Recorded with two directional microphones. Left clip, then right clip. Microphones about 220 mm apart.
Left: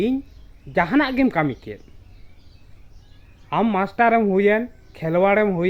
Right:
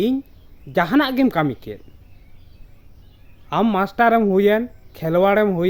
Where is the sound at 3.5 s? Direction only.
20° right (ahead or behind).